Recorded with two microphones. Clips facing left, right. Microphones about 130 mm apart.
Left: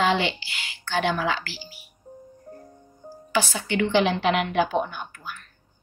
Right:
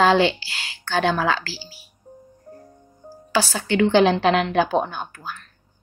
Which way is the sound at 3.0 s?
Centre (ahead or behind).